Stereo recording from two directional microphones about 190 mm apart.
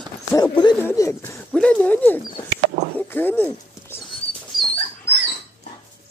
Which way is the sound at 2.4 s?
60° right (ahead or behind).